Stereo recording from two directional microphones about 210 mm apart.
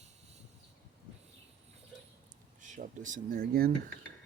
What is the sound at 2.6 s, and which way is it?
Speech, 35° right (ahead or behind).